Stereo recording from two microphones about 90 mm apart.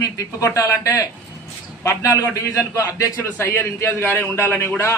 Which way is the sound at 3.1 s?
20° left (ahead or behind).